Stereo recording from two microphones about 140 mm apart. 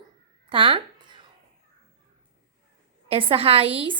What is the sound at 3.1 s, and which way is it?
Speech, 40° right (ahead or behind).